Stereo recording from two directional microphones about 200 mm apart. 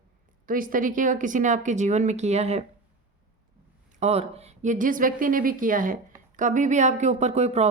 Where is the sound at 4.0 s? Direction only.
30° right (ahead or behind).